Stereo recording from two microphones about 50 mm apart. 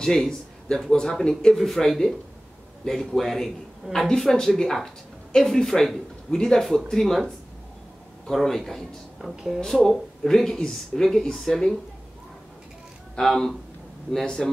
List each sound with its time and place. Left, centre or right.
0.0 s speech: centre
4.1 s speech: centre
8.3 s speech: centre
9.2 s a woman's voice: centre
9.6 s speech: centre
13.1 s speech: centre
14.2 s speech: centre